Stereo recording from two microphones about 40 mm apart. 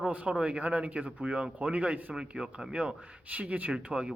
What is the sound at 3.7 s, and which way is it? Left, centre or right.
Speech, right.